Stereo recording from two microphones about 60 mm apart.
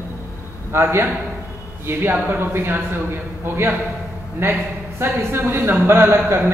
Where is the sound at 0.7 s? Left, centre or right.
Right.